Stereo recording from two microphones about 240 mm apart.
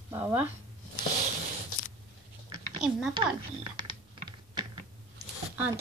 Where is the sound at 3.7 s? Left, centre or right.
Centre.